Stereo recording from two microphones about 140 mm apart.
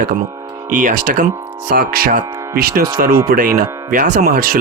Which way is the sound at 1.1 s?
85° right.